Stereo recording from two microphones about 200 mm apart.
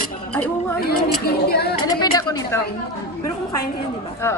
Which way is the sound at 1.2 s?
50° left (ahead or behind).